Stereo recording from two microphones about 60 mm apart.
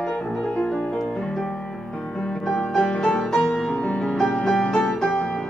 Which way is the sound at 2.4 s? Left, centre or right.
Centre.